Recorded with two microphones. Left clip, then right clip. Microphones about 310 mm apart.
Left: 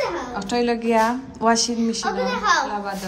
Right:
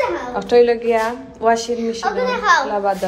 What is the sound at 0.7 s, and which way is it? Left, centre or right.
A woman's voice, centre.